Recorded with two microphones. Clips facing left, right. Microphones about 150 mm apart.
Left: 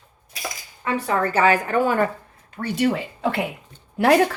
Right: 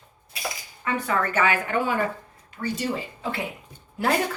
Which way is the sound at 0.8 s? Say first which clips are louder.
Left 3 dB; 35° left (ahead or behind).